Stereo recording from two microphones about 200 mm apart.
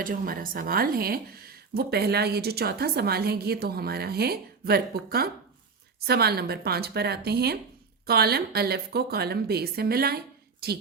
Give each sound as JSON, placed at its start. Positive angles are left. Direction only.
{"t": 0.0, "sound": "speech", "side_deg": -45}